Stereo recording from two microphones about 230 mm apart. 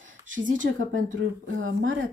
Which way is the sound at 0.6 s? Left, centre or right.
Right.